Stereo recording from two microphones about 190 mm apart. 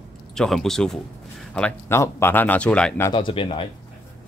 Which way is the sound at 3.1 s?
25° left (ahead or behind).